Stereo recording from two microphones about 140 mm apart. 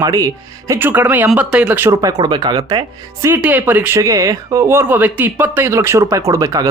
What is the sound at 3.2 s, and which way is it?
Speech, 15° right (ahead or behind).